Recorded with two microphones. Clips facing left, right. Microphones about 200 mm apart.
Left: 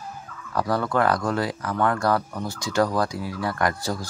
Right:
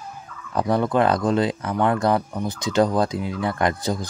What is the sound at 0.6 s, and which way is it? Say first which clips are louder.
Speech: right 3 dB; 20° right (ahead or behind).